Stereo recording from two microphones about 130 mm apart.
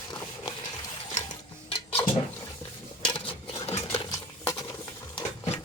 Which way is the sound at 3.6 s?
50° left (ahead or behind).